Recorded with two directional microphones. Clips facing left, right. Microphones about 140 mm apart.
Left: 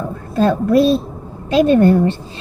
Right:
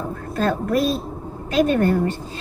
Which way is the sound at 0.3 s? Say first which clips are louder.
Left 7 dB; 25° left (ahead or behind).